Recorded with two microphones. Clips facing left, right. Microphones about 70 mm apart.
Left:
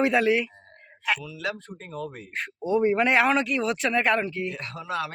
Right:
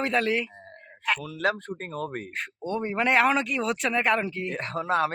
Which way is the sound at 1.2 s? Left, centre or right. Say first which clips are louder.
Right 5 dB; right.